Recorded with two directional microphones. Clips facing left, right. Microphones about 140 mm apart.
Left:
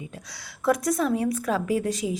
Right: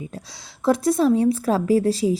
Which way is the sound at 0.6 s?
25° right (ahead or behind).